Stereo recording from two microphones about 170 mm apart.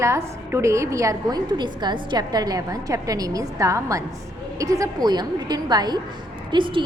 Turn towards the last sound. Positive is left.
turn(degrees=-30)  # may be behind; listen again after turning